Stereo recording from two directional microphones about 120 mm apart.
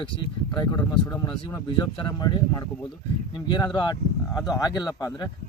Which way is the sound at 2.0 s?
40° left (ahead or behind).